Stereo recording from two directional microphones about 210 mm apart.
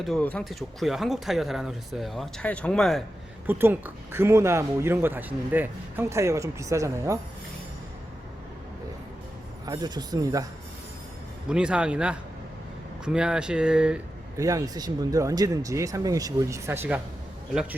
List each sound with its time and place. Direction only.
0.0 s speech: 5° left (ahead or behind)
3.4 s speech: 10° right (ahead or behind)
9.6 s speech: 20° right (ahead or behind)
11.4 s speech: 5° right (ahead or behind)
14.4 s speech: 15° right (ahead or behind)